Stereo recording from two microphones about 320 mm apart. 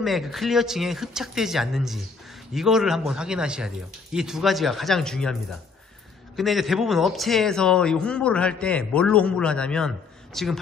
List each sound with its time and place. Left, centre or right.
0.0 s a man's voice: centre